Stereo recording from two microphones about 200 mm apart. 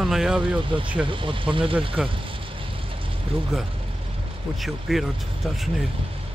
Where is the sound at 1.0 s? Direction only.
25° right (ahead or behind).